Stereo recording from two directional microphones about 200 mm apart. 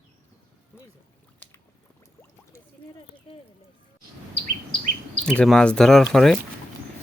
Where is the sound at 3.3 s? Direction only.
25° left (ahead or behind).